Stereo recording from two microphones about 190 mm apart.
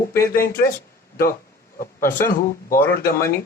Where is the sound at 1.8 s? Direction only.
45° left (ahead or behind).